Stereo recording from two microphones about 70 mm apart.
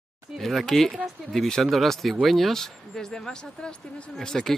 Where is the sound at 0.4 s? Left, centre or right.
Centre.